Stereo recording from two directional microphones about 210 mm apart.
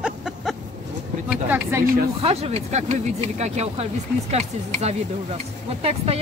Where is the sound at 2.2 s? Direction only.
30° right (ahead or behind).